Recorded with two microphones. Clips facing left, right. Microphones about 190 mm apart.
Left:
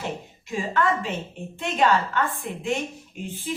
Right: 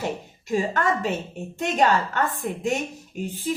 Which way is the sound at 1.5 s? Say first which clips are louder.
Right 1 dB; 45° right (ahead or behind).